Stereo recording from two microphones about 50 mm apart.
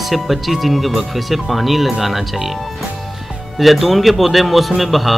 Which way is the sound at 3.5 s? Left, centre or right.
Centre.